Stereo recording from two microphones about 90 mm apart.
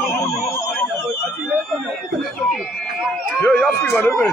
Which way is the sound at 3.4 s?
25° left (ahead or behind).